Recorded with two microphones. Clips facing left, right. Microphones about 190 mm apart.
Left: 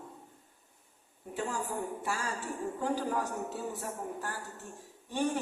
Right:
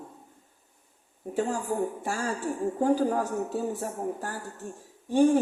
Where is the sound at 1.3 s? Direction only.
45° right (ahead or behind).